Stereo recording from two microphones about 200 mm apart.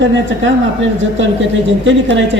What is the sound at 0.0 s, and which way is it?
Speech, 65° right (ahead or behind).